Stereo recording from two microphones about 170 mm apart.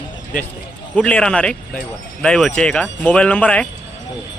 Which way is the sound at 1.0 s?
5° left (ahead or behind).